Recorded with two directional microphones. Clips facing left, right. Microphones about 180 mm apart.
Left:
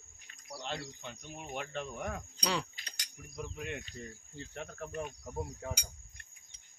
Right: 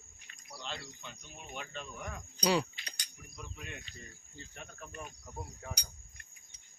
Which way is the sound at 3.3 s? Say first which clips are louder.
Left 7 dB; 65° left (ahead or behind).